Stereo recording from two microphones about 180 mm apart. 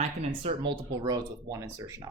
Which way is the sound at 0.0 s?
35° right (ahead or behind).